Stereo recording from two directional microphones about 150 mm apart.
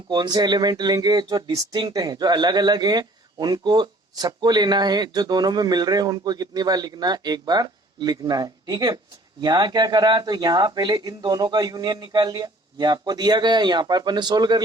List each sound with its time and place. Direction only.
0.1 s speech: 25° right (ahead or behind)